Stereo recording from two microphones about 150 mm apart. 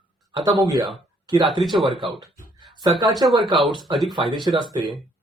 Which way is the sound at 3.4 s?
Centre (ahead or behind).